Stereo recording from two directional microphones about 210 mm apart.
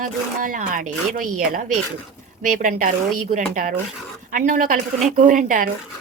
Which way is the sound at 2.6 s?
40° right (ahead or behind).